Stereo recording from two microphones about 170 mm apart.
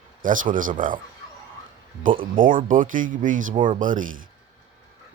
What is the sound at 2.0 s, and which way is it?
A man's voice, 55° right (ahead or behind).